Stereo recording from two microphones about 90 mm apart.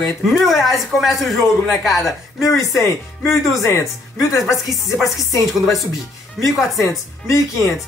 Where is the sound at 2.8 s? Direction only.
30° left (ahead or behind).